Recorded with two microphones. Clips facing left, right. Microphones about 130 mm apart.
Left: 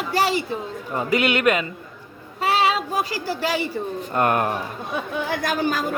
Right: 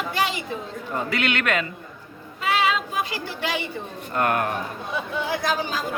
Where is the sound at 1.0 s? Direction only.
15° left (ahead or behind).